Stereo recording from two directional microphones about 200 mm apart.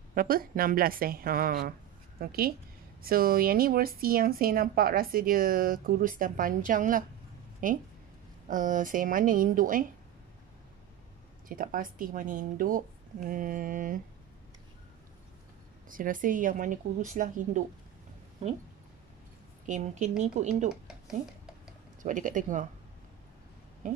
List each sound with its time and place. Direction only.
0.1 s a woman's voice: 45° right (ahead or behind)
11.4 s a woman's voice: 45° right (ahead or behind)
15.9 s speech: 45° right (ahead or behind)
19.6 s speech: 35° right (ahead or behind)
22.0 s speech: 40° right (ahead or behind)